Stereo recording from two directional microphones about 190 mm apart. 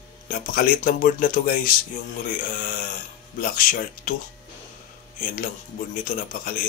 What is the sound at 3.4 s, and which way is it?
Speech, 45° left (ahead or behind).